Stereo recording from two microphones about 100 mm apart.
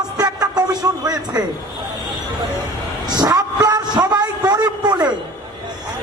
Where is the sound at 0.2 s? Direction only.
40° right (ahead or behind).